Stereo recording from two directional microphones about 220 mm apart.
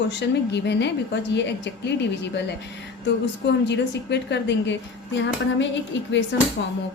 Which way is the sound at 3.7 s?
50° left (ahead or behind).